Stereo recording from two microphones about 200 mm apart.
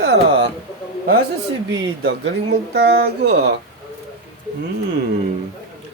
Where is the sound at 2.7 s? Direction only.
55° right (ahead or behind).